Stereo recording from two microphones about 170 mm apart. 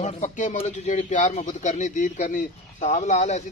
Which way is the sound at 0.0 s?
45° left (ahead or behind).